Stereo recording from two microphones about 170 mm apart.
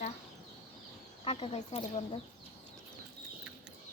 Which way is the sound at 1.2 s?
35° left (ahead or behind).